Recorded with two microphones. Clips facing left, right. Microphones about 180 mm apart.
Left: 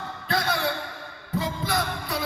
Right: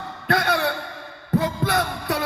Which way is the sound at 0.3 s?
65° right (ahead or behind).